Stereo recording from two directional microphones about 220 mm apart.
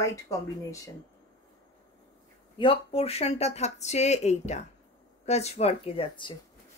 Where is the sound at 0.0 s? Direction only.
15° left (ahead or behind).